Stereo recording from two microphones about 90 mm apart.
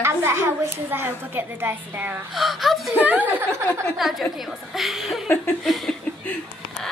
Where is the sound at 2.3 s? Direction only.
Centre (ahead or behind).